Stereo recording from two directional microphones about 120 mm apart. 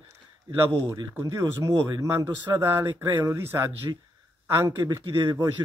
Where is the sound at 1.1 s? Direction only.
30° right (ahead or behind).